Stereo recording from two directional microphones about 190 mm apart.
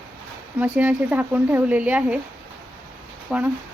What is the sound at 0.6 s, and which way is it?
Speech, 10° right (ahead or behind).